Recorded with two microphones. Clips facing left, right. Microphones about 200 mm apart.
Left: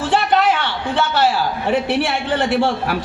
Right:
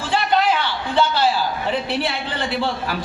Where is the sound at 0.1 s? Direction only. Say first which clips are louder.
Left 2 dB; 65° left (ahead or behind).